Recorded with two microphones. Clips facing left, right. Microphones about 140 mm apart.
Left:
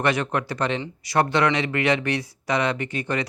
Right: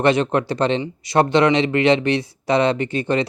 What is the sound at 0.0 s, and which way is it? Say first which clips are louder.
Speech: right 6 dB; 25° right (ahead or behind).